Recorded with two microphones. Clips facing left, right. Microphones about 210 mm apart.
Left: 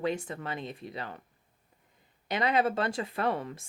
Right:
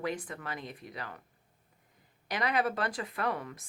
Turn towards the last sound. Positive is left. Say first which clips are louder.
# left 4 dB
turn(degrees=30)  # may be behind; listen again after turning